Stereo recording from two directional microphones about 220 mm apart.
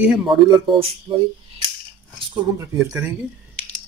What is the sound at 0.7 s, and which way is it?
Speech, 25° right (ahead or behind).